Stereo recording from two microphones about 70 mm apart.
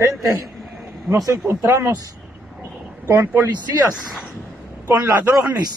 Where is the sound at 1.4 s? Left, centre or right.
Right.